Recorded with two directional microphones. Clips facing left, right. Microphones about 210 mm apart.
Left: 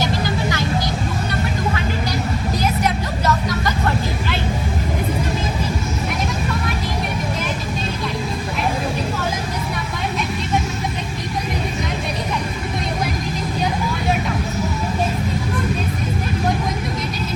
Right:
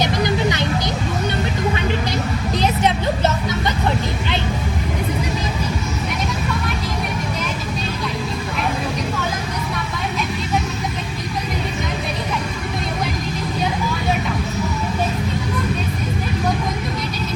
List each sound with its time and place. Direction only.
0.0 s vehicle: 20° right (ahead or behind)
2.6 s music: 25° right (ahead or behind)